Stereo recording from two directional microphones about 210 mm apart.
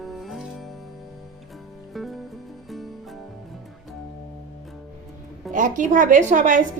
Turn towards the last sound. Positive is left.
turn(degrees=-35)  # may be behind; listen again after turning